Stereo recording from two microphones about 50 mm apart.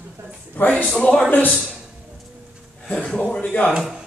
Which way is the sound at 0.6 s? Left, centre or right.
Left.